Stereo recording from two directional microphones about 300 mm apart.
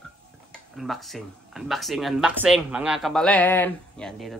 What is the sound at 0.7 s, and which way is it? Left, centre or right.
Speech, centre.